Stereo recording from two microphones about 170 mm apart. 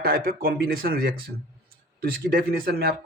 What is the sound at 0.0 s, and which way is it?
Speech, 60° right (ahead or behind).